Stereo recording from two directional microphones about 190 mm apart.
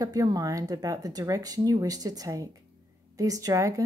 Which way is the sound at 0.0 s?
20° right (ahead or behind).